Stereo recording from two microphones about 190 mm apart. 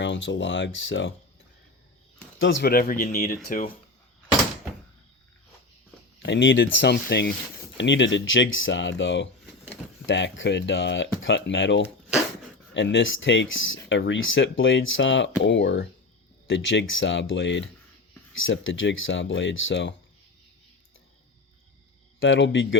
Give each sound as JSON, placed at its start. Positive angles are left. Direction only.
{"t": 0.0, "sound": "speech", "side_deg": 75}
{"t": 2.4, "sound": "speech", "side_deg": 65}
{"t": 6.2, "sound": "speech", "side_deg": 70}
{"t": 7.8, "sound": "speech", "side_deg": 75}
{"t": 18.4, "sound": "speech", "side_deg": 85}
{"t": 22.2, "sound": "speech", "side_deg": 80}